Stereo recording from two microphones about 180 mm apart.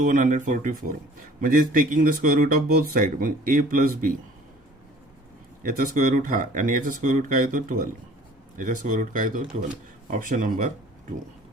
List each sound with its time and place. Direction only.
0.0 s speech: 45° right (ahead or behind)
5.6 s speech: 50° right (ahead or behind)